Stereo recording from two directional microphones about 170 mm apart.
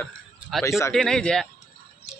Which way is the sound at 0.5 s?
Centre (ahead or behind).